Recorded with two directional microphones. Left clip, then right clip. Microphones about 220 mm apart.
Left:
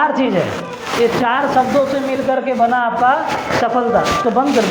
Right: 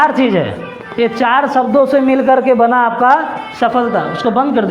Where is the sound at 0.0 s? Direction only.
50° right (ahead or behind).